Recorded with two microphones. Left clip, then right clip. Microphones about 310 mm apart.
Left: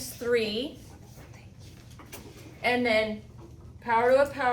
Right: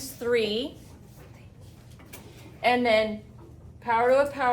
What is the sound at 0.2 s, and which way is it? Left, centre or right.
Speech, centre.